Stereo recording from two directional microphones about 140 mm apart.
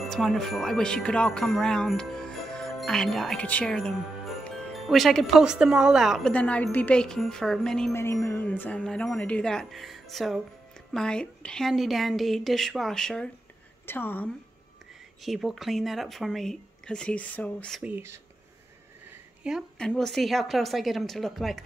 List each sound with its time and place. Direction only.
0.0 s jingle bell: centre (ahead or behind)
7.9 s jingle bell: 20° left (ahead or behind)
13.8 s a woman's voice: 15° left (ahead or behind)
15.2 s jingle bell: centre (ahead or behind)
17.8 s speech: 15° right (ahead or behind)
19.4 s speech: 5° right (ahead or behind)
19.9 s jingle bell: 5° left (ahead or behind)